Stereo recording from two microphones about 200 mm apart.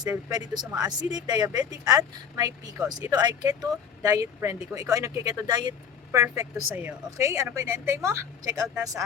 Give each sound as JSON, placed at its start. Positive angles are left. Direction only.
{"t": 0.3, "sound": "speech", "side_deg": -20}